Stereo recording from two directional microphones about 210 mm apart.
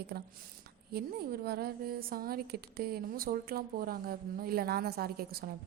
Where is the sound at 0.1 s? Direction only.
45° right (ahead or behind).